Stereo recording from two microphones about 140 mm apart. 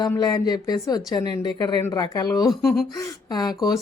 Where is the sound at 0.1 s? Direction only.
25° left (ahead or behind).